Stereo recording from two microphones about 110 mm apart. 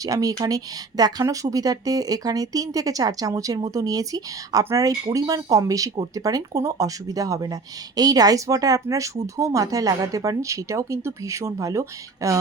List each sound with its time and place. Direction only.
0.0 s speech: 30° right (ahead or behind)